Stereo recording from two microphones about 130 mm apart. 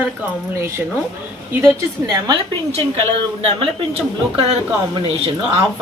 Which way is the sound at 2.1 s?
25° right (ahead or behind).